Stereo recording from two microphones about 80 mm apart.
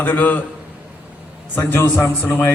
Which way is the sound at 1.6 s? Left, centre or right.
Left.